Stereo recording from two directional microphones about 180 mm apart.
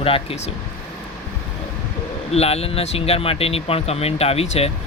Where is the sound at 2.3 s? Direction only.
35° left (ahead or behind).